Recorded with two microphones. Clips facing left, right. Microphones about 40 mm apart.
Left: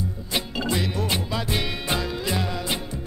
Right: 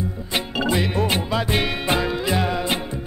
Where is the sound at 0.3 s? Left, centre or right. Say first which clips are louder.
Right 4 dB; right.